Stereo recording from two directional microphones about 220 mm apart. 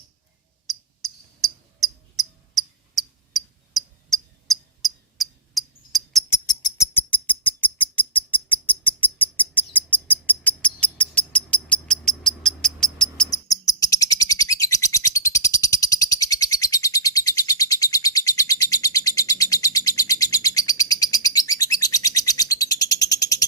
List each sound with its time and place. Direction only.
0.7 s cricket: centre (ahead or behind)
6.3 s a sound: 15° left (ahead or behind)
13.5 s bird: 15° left (ahead or behind)